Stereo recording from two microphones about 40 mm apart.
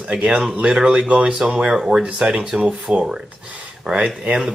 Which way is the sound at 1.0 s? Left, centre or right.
Right.